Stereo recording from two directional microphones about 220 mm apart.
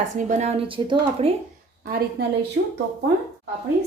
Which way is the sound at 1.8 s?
45° right (ahead or behind).